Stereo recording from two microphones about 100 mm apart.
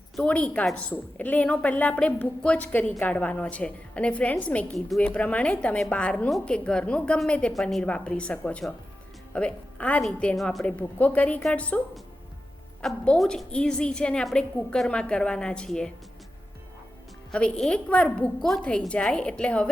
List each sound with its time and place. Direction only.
0.2 s a woman's voice: 10° left (ahead or behind)
12.8 s a woman's voice: 5° left (ahead or behind)
17.3 s a woman's voice: 10° left (ahead or behind)